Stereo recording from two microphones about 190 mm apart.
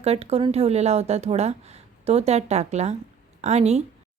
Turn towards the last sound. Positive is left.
turn(degrees=-35)  # may be behind; listen again after turning